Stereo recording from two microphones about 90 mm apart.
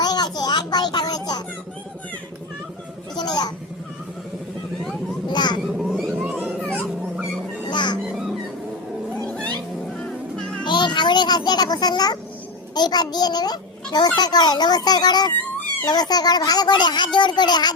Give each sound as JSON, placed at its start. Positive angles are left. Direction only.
{"t": 0.0, "sound": "a sound", "side_deg": 50}
{"t": 3.2, "sound": "a sound", "side_deg": 50}
{"t": 5.3, "sound": "a sound", "side_deg": 55}
{"t": 5.7, "sound": "a sound", "side_deg": 0}
{"t": 7.7, "sound": "music", "side_deg": 55}
{"t": 8.0, "sound": "music", "side_deg": -5}
{"t": 9.1, "sound": "cat", "side_deg": 15}
{"t": 10.0, "sound": "music", "side_deg": 10}
{"t": 10.6, "sound": "music", "side_deg": 55}
{"t": 12.7, "sound": "a child's voice", "side_deg": 50}
{"t": 15.4, "sound": "cat", "side_deg": 20}
{"t": 15.9, "sound": "a child's voice", "side_deg": 50}